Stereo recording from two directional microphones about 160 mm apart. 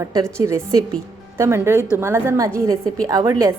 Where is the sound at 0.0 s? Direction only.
20° right (ahead or behind).